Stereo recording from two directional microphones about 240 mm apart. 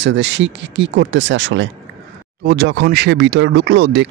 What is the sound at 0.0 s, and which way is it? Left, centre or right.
Speech, right.